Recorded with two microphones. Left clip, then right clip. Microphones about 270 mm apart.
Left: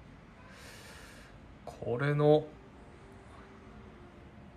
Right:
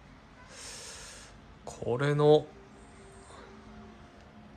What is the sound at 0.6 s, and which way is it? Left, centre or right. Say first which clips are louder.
Snort: right 6 dB; centre.